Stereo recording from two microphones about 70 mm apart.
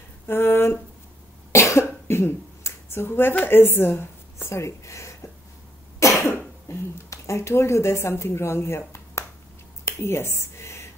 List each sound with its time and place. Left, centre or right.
0.3 s speech: left
1.5 s cough: left
2.0 s a sound: left
3.4 s a woman's voice: left
6.7 s a woman's voice: left
9.8 s a sound: left